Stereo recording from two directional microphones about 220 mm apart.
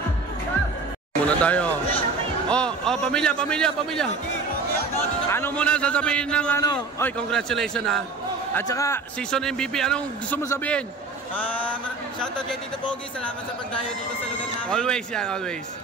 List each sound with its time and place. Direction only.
1.2 s a man's voice: 5° left (ahead or behind)
5.3 s a man's voice: 5° left (ahead or behind)
6.6 s a man's voice: 15° left (ahead or behind)
7.2 s a man's voice: centre (ahead or behind)
8.5 s a man's voice: 15° left (ahead or behind)
9.3 s a man's voice: 5° left (ahead or behind)
14.7 s a man's voice: 5° left (ahead or behind)